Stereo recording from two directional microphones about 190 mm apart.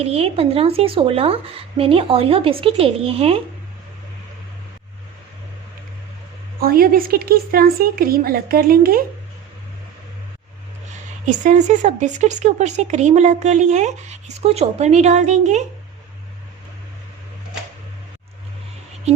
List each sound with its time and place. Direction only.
0.0 s a woman's voice: 30° right (ahead or behind)
6.6 s a woman's voice: 50° right (ahead or behind)
11.3 s speech: 40° right (ahead or behind)